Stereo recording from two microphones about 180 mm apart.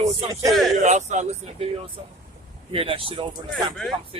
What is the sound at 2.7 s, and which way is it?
Speech, 30° right (ahead or behind).